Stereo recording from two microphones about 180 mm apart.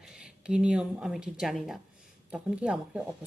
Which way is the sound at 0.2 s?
5° right (ahead or behind).